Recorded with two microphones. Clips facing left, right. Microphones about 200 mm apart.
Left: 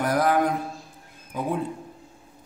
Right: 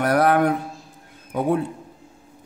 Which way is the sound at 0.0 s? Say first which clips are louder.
Right 4 dB; 65° right (ahead or behind).